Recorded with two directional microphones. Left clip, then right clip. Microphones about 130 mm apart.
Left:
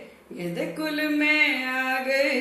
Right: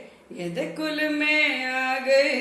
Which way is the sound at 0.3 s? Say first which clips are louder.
Even; 15° right (ahead or behind).